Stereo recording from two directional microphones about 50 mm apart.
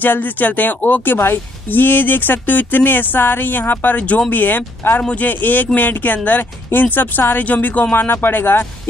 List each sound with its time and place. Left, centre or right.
0.0 s speech: left
5.0 s speech: left